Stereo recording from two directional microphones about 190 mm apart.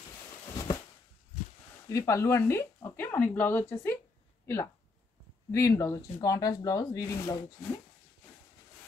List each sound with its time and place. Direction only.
1.9 s speech: 15° left (ahead or behind)